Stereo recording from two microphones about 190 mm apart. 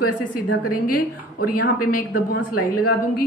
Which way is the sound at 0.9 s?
50° left (ahead or behind).